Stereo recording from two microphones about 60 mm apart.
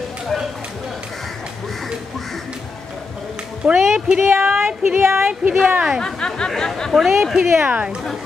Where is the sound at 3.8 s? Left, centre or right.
Centre.